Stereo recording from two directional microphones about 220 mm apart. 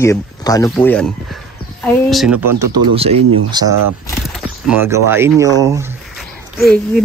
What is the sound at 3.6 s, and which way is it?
Speech, 20° right (ahead or behind).